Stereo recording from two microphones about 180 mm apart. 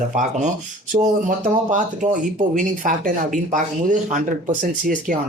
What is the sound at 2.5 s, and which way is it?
Speech, 45° right (ahead or behind).